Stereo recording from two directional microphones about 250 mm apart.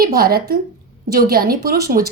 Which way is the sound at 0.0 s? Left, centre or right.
Right.